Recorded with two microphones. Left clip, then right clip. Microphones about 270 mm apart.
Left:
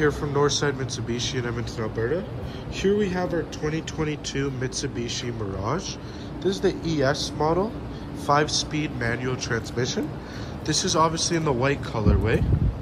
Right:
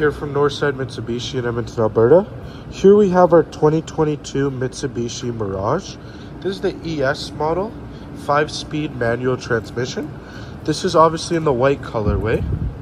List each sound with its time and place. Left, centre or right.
0.2 s a man's voice: centre
7.0 s speech: centre
7.3 s a man's voice: centre